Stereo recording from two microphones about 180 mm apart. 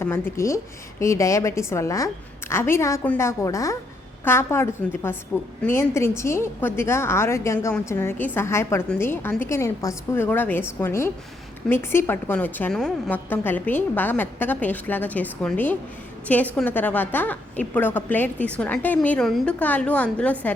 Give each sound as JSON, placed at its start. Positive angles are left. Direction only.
{"t": 0.0, "sound": "a woman's voice", "side_deg": 15}